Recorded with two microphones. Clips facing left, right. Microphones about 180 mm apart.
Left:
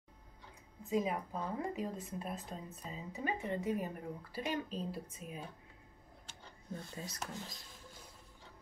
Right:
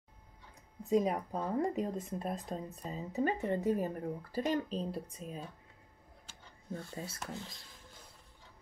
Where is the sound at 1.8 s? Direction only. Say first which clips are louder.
Right 5 dB; centre (ahead or behind).